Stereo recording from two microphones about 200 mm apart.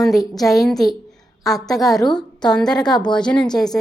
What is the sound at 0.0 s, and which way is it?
Speech, centre (ahead or behind).